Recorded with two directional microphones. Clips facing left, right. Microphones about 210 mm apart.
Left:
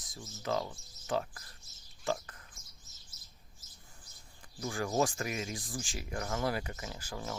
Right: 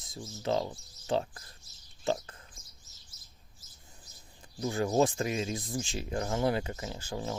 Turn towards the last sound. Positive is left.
turn(degrees=-25)  # may be behind; listen again after turning